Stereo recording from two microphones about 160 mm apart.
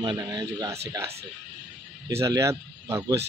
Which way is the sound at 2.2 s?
20° right (ahead or behind).